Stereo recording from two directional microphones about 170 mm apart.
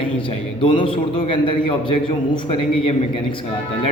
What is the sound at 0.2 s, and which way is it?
A man's voice, 30° left (ahead or behind).